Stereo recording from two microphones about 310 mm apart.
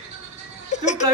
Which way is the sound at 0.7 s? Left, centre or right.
Left.